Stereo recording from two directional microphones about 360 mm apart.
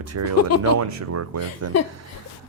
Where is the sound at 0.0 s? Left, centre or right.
Right.